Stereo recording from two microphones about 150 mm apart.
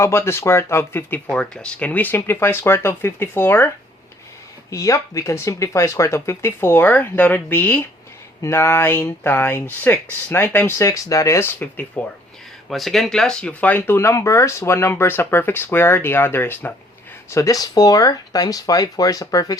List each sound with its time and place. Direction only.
0.0 s speech: 15° left (ahead or behind)
4.7 s speech: 20° left (ahead or behind)
12.6 s speech: centre (ahead or behind); by 19.5 s 25° left (ahead or behind)